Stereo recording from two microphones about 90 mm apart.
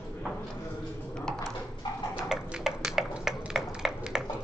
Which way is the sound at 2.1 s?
5° right (ahead or behind).